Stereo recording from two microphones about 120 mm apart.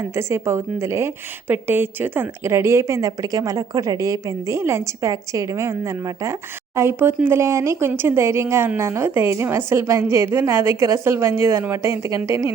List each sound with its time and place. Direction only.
0.2 s speech: 25° right (ahead or behind)
6.7 s speech: 20° right (ahead or behind)